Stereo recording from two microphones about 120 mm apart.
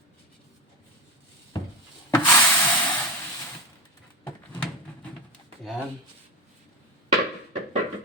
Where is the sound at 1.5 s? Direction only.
35° left (ahead or behind).